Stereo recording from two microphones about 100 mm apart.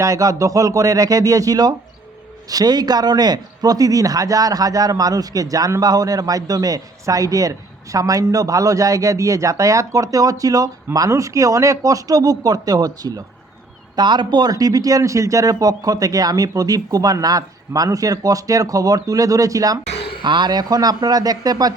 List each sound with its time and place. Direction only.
0.0 s a man's voice: 35° right (ahead or behind)
20.0 s a sound: 65° left (ahead or behind)
20.2 s a man's voice: 50° right (ahead or behind)